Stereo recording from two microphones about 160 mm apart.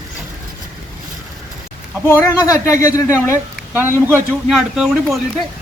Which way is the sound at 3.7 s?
15° right (ahead or behind).